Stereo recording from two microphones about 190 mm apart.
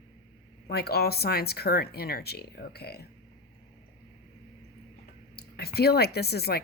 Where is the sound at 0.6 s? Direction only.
55° left (ahead or behind).